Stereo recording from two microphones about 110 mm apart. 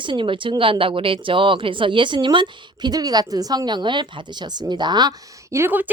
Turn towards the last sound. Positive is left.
turn(degrees=-15)  # may be behind; listen again after turning